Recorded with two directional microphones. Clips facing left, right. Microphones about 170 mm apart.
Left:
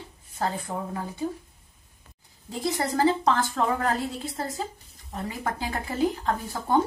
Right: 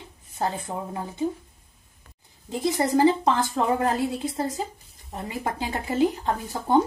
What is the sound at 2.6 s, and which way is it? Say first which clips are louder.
A woman's voice: right 4 dB; 20° right (ahead or behind).